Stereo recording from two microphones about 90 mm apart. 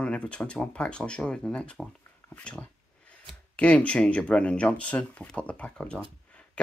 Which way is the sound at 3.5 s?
15° left (ahead or behind).